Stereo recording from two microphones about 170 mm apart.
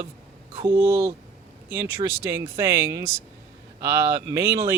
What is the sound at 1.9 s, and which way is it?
Speech, 15° right (ahead or behind).